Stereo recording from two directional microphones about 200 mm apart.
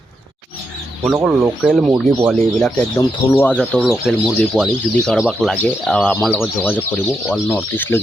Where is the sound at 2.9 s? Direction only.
10° left (ahead or behind).